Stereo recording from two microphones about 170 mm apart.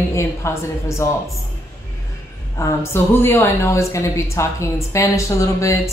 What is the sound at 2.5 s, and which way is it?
A woman's voice, 15° left (ahead or behind).